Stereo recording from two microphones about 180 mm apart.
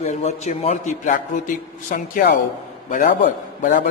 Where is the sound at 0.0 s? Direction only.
40° left (ahead or behind).